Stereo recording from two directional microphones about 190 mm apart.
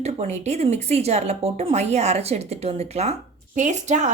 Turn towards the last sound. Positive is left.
turn(degrees=-40)  # may be behind; listen again after turning